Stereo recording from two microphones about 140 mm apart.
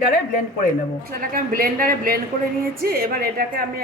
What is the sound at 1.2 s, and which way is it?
A woman's voice, 90° right.